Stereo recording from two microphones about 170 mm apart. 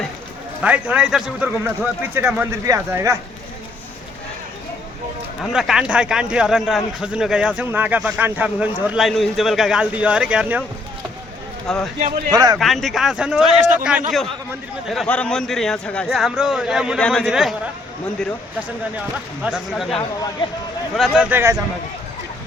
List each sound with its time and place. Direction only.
0.6 s a man's voice: 5° right (ahead or behind)
5.4 s speech: centre (ahead or behind)
11.7 s speech: centre (ahead or behind)
12.3 s speech: 20° right (ahead or behind)
12.5 s speech: centre (ahead or behind)
19.1 s speech: 5° right (ahead or behind)
21.2 s a man's voice: 15° right (ahead or behind)